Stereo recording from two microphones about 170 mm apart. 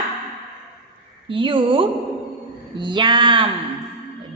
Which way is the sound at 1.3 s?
30° right (ahead or behind).